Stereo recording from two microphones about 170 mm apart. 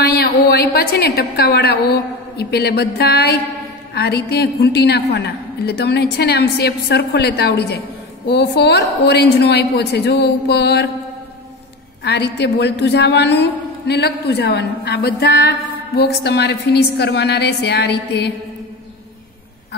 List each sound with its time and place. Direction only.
0.0 s a woman's voice: 65° left (ahead or behind)
12.0 s a woman's voice: 80° left